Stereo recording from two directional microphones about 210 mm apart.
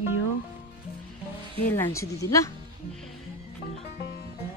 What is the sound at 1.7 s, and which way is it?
Speech, 10° left (ahead or behind).